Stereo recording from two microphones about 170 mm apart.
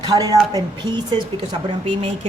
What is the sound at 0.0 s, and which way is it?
A woman's voice, 20° right (ahead or behind).